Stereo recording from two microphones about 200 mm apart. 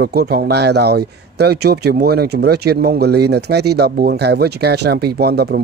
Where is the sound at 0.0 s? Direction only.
50° right (ahead or behind).